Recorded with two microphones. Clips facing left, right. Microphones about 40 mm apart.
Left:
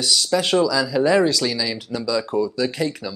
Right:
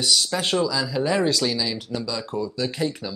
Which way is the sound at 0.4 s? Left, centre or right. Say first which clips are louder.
Left 4 dB; left.